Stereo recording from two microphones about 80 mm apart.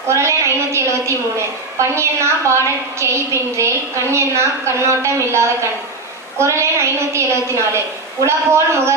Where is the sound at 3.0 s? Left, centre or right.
Right.